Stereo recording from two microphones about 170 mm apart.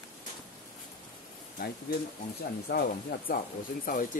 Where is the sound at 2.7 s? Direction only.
60° left (ahead or behind).